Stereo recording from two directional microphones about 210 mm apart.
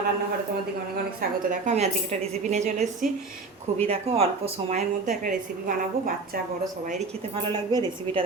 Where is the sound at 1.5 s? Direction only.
35° right (ahead or behind).